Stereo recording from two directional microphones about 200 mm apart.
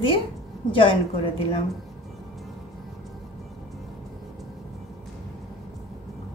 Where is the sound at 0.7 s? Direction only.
25° left (ahead or behind).